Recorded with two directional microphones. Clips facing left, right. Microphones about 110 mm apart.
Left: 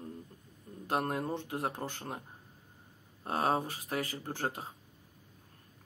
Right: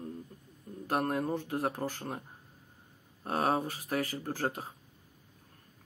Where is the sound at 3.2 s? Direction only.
30° left (ahead or behind).